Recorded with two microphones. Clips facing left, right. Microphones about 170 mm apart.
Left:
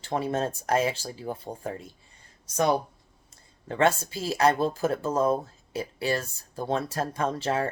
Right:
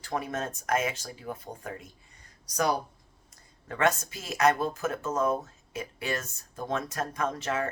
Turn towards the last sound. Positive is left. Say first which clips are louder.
# left 3 dB
turn(degrees=30)  # may be behind; listen again after turning